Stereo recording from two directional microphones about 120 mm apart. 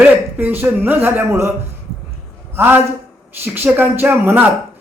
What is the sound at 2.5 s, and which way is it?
Speech, 20° right (ahead or behind).